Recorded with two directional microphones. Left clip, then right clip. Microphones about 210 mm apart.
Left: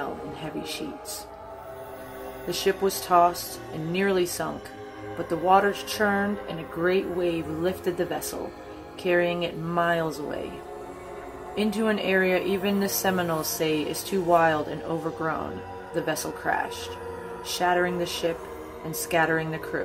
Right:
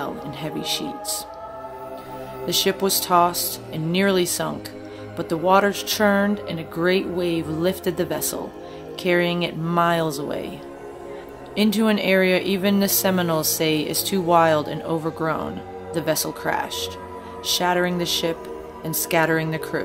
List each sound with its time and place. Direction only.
0.6 s speech: 35° right (ahead or behind)
2.4 s speech: 35° right (ahead or behind)
11.5 s speech: 30° right (ahead or behind)